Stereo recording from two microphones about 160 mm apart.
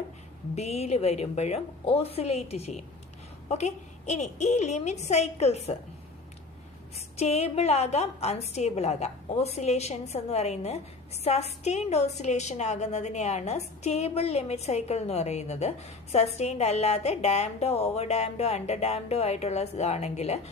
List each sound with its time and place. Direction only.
0.6 s a woman's voice: 40° left (ahead or behind)
7.2 s a woman's voice: 40° left (ahead or behind)